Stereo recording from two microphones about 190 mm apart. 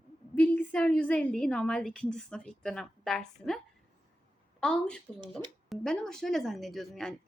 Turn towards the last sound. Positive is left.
turn(degrees=0)  # may be behind; listen again after turning